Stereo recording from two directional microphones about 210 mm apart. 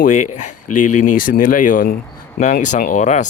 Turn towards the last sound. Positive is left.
turn(degrees=35)  # may be behind; listen again after turning